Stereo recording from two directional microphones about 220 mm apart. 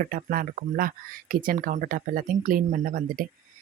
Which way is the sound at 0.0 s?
40° right (ahead or behind).